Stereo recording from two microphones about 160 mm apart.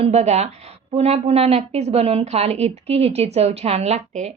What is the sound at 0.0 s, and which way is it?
A woman's voice, 40° right (ahead or behind).